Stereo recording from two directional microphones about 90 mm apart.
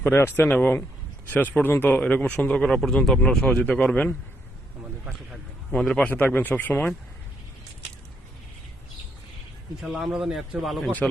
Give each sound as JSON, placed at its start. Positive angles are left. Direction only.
{"t": 0.0, "sound": "speech", "side_deg": 25}
{"t": 2.6, "sound": "a man's voice", "side_deg": 5}
{"t": 5.7, "sound": "speech", "side_deg": 5}
{"t": 6.1, "sound": "speech", "side_deg": 20}
{"t": 9.8, "sound": "a man's voice", "side_deg": -5}